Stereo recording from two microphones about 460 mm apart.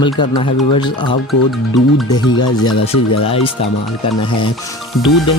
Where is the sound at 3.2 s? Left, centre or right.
Centre.